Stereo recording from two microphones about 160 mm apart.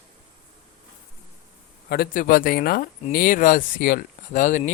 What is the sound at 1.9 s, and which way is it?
Speech, 70° left (ahead or behind).